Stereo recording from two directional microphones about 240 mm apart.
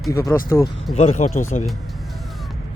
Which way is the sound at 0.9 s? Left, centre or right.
Left.